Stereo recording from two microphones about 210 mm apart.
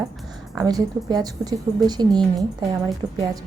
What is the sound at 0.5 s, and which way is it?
Speech, 20° right (ahead or behind).